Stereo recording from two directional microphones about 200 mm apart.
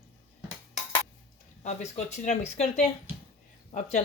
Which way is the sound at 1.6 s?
35° left (ahead or behind).